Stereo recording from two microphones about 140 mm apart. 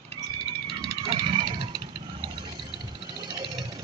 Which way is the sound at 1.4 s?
35° right (ahead or behind).